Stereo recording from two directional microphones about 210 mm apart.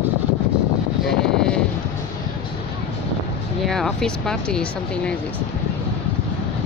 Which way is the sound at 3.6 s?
Centre (ahead or behind).